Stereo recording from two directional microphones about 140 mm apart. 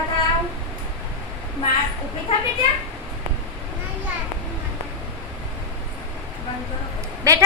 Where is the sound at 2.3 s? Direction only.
50° left (ahead or behind).